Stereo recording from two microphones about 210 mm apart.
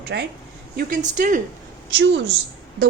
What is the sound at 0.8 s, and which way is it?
Speech, 35° right (ahead or behind).